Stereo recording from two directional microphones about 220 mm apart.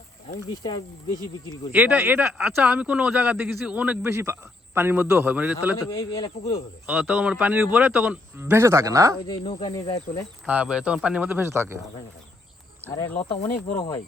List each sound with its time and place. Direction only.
0.5 s speech: 20° left (ahead or behind)
1.7 s speech: 5° right (ahead or behind)
5.7 s speech: 15° left (ahead or behind)
6.8 s speech: 5° right (ahead or behind)
9.2 s speech: 25° left (ahead or behind)
10.4 s speech: 5° right (ahead or behind)
13.2 s speech: 25° left (ahead or behind)